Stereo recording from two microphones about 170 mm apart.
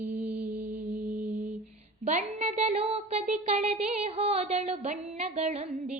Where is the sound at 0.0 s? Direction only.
55° right (ahead or behind).